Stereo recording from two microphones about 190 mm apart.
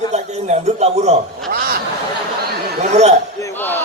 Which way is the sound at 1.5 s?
50° right (ahead or behind).